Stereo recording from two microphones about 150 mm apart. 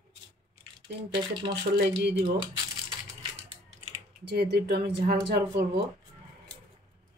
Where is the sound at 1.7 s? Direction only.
90° right.